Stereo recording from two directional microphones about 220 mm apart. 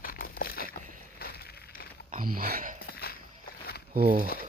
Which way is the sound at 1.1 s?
45° left (ahead or behind).